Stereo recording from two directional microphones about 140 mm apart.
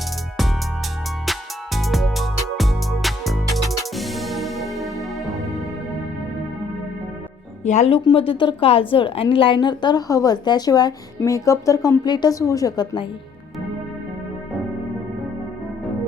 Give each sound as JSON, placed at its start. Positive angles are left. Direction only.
{"t": 1.2, "sound": "music", "side_deg": 0}
{"t": 7.6, "sound": "speech", "side_deg": 60}
{"t": 7.9, "sound": "a woman's voice", "side_deg": 40}